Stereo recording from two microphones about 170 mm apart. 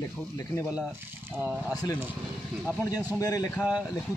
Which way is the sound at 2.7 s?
20° left (ahead or behind).